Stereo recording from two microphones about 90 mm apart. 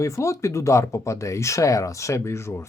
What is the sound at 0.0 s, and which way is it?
Speech, 35° left (ahead or behind).